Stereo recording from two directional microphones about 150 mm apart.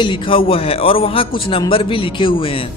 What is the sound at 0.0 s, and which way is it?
Speech, 35° left (ahead or behind).